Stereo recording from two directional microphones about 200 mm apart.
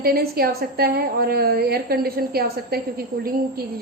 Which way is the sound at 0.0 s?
50° right (ahead or behind).